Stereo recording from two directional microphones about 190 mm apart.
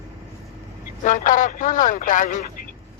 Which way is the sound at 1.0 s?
45° left (ahead or behind).